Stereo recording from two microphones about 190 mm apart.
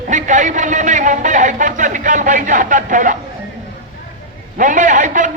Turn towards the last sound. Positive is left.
turn(degrees=-40)  # may be behind; listen again after turning